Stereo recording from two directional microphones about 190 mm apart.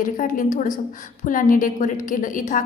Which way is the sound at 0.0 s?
45° left (ahead or behind).